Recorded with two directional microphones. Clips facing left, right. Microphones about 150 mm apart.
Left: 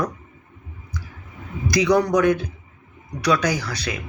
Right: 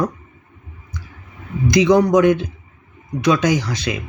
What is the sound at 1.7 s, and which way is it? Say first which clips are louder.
Speech: right 5 dB; 20° right (ahead or behind).